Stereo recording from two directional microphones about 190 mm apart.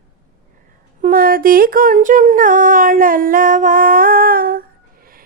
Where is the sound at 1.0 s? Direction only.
45° right (ahead or behind).